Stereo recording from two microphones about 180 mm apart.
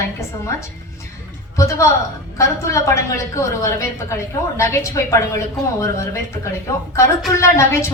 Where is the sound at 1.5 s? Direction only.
15° left (ahead or behind).